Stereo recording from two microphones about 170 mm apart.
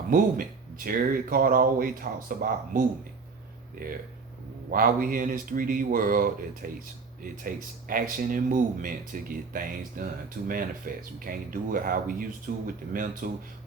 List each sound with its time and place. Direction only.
0.1 s speech: 55° right (ahead or behind)